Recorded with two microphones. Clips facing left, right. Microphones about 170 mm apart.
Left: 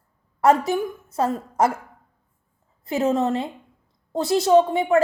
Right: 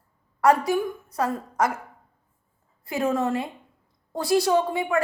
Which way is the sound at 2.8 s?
25° left (ahead or behind).